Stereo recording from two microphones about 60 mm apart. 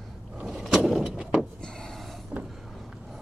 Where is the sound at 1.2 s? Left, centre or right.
Centre.